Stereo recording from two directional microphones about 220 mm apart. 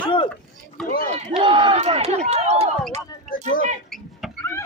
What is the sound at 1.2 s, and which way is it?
Run, 25° right (ahead or behind).